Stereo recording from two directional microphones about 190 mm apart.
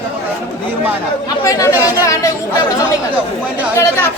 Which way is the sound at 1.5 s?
15° left (ahead or behind).